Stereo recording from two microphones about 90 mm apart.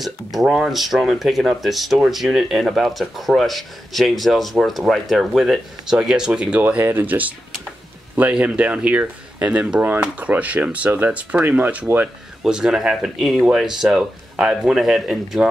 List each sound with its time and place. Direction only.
0.0 s speech: centre (ahead or behind); by 12.1 s 20° right (ahead or behind)
12.4 s speech: 5° right (ahead or behind)